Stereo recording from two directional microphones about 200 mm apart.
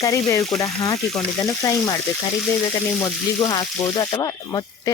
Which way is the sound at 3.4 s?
20° left (ahead or behind).